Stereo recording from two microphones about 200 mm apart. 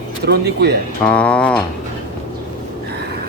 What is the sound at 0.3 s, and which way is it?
Speech, 55° right (ahead or behind).